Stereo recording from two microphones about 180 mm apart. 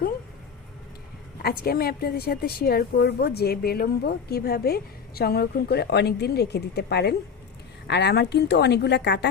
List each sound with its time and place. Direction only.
1.4 s a woman's voice: 60° left (ahead or behind)